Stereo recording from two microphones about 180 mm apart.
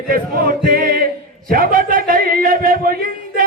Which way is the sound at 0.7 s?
55° right (ahead or behind).